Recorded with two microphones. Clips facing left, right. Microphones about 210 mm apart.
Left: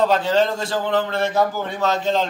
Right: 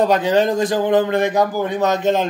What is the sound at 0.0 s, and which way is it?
A man's voice, 15° right (ahead or behind).